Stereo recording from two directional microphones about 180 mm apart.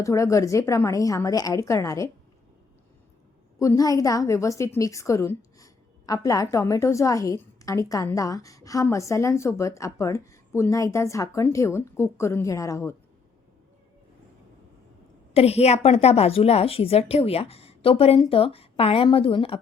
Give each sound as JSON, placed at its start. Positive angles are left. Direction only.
{"t": 0.0, "sound": "a woman's voice", "side_deg": 15}
{"t": 3.6, "sound": "a woman's voice", "side_deg": 20}
{"t": 15.3, "sound": "a woman's voice", "side_deg": 35}